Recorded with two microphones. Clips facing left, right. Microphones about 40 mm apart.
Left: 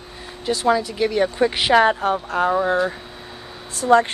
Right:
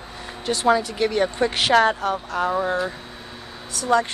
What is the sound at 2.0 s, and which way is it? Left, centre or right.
Speech, left.